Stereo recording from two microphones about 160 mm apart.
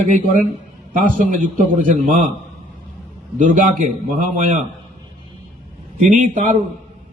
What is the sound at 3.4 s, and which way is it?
Speech, 55° right (ahead or behind).